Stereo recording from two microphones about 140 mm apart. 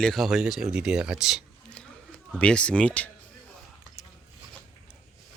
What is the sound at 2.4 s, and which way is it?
Speech, 5° left (ahead or behind).